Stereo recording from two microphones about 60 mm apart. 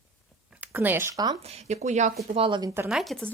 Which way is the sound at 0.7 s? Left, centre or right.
Right.